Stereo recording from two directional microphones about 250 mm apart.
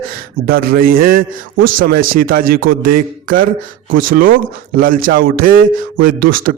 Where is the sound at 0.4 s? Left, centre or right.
Right.